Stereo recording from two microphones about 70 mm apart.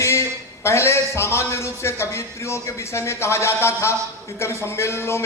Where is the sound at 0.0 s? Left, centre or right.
Left.